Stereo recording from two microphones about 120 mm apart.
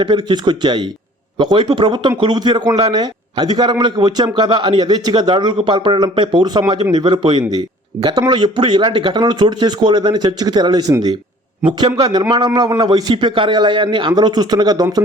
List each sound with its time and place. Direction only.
0.0 s a man's voice: 40° right (ahead or behind)